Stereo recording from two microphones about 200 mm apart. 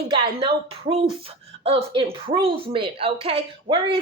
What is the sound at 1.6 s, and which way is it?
A woman's voice, 25° right (ahead or behind).